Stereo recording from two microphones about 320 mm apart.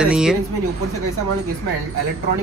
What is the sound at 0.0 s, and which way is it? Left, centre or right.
Speech, centre.